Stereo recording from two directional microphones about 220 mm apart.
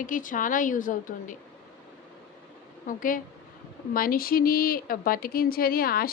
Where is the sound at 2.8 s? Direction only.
40° left (ahead or behind).